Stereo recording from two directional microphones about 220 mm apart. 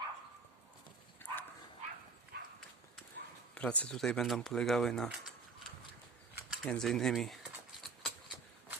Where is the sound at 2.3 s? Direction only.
45° right (ahead or behind).